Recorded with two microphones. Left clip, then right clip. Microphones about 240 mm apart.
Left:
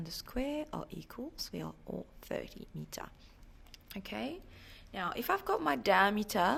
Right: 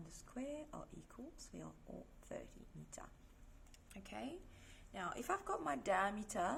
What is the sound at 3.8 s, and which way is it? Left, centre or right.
Speech, left.